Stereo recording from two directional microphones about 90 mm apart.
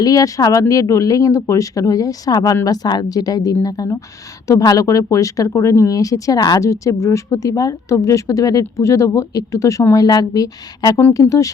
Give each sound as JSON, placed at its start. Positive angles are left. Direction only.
{"t": 0.0, "sound": "a woman's voice", "side_deg": 40}
{"t": 6.7, "sound": "a woman's voice", "side_deg": 35}